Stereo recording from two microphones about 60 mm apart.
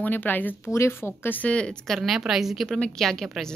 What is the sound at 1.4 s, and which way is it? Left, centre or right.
Speech, centre.